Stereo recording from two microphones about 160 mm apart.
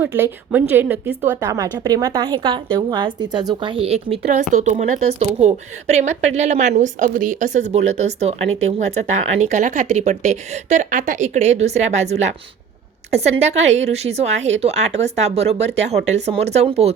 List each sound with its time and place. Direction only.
0.0 s a woman's voice: 15° right (ahead or behind); by 4.2 s 40° right (ahead or behind)
4.5 s a woman's voice: 50° right (ahead or behind)
9.4 s a woman's voice: 50° right (ahead or behind)